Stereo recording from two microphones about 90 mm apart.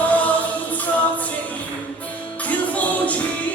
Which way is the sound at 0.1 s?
15° left (ahead or behind).